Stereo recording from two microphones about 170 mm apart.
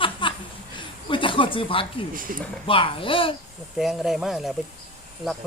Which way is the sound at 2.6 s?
30° left (ahead or behind).